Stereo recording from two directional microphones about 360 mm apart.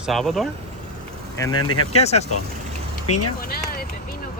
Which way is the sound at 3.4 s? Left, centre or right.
Left.